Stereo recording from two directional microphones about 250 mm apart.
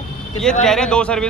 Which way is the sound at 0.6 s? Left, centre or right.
Centre.